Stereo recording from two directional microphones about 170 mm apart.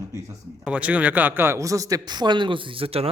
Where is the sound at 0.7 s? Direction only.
10° right (ahead or behind).